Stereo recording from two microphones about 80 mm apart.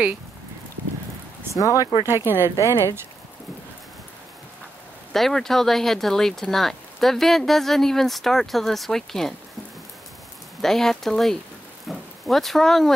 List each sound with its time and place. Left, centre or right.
1.5 s speech: left
2.0 s speech: right
5.1 s speech: centre
10.6 s speech: centre